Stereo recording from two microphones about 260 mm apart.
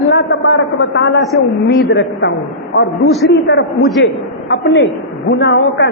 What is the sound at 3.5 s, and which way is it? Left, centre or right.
A woman's voice, left.